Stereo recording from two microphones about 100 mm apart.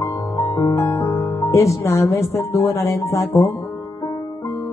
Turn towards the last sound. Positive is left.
turn(degrees=30)  # may be behind; listen again after turning